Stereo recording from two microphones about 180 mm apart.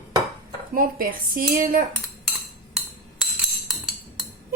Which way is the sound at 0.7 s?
50° right (ahead or behind).